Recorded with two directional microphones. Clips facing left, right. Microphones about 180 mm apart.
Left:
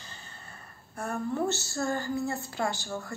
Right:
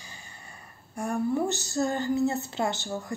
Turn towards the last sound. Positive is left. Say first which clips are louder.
# right 2 dB
turn(degrees=-20)  # may be behind; listen again after turning